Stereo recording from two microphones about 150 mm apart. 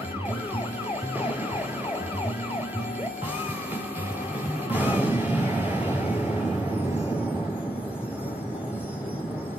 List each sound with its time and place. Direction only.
4.6 s music: 10° right (ahead or behind)